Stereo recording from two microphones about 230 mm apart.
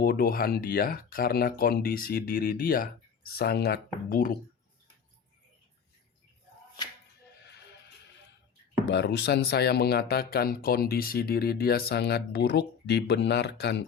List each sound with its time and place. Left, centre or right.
0.0 s speech: left
8.9 s speech: left